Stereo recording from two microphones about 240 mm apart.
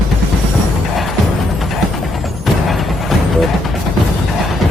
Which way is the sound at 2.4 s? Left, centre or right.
Centre.